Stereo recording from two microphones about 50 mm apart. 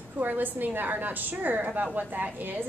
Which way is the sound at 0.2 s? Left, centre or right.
Right.